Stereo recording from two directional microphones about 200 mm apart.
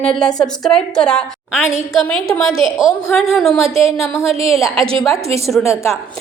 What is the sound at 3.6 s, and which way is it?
Speech, 30° right (ahead or behind).